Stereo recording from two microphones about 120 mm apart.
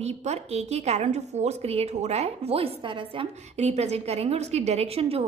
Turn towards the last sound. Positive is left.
turn(degrees=-55)  # may be behind; listen again after turning